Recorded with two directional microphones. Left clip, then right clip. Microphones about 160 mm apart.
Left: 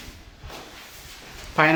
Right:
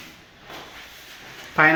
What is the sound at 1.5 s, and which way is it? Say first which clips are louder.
Speech: right 2 dB; 5° left (ahead or behind).